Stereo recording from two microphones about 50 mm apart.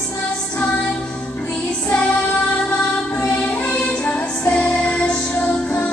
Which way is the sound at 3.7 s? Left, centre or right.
Left.